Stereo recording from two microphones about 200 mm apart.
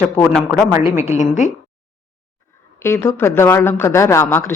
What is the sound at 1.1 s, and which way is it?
Speech, 35° left (ahead or behind).